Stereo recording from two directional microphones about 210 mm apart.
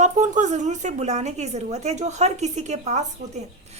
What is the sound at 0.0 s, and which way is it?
A woman's voice, 35° right (ahead or behind).